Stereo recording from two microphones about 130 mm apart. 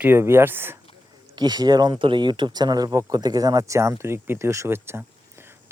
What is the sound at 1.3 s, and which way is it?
Speech, 35° right (ahead or behind).